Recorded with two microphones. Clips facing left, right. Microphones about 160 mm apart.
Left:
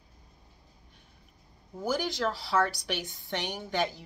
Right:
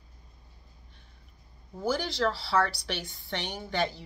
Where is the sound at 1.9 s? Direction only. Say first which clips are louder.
Right 1 dB; 15° left (ahead or behind).